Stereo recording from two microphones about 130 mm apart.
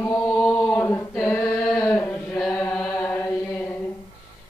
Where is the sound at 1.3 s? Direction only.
20° left (ahead or behind).